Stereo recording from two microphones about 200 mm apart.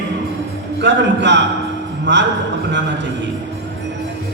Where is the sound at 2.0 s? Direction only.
60° right (ahead or behind).